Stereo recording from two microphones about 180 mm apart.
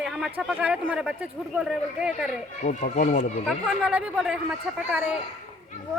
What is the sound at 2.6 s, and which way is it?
Speech, 45° left (ahead or behind).